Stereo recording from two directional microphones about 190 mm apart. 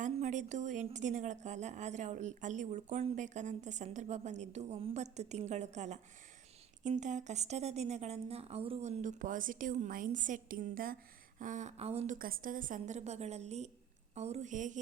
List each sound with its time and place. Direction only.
0.0 s a woman's voice: 40° right (ahead or behind)